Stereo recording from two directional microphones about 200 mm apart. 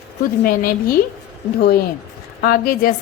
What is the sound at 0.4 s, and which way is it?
Speech, 45° left (ahead or behind).